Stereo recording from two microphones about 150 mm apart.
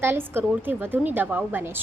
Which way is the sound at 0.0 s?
15° right (ahead or behind).